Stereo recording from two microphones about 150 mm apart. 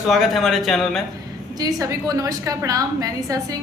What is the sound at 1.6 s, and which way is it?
A woman's voice, 20° right (ahead or behind).